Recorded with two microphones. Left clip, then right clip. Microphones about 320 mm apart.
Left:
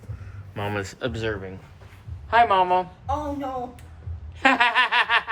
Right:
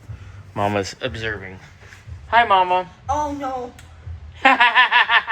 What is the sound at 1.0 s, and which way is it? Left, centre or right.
Speech, centre.